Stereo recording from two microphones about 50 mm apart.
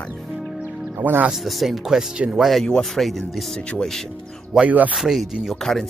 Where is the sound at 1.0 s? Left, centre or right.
Right.